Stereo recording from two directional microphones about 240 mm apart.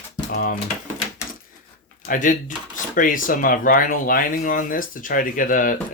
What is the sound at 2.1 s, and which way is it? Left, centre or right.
Speech, left.